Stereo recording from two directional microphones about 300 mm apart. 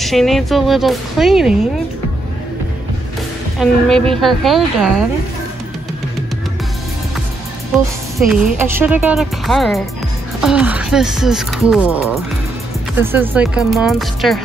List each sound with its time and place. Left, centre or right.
0.0 s speech: centre
3.5 s speech: centre
7.7 s speech: centre